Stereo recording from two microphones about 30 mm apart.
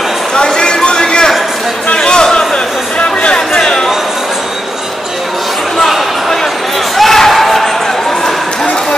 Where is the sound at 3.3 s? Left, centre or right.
Left.